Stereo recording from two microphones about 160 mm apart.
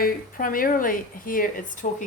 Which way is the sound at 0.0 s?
60° left (ahead or behind).